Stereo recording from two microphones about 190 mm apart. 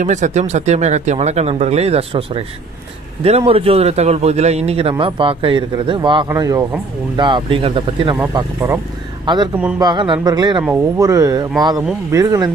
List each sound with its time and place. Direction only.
0.0 s a man's voice: 40° right (ahead or behind); by 12.4 s 20° right (ahead or behind)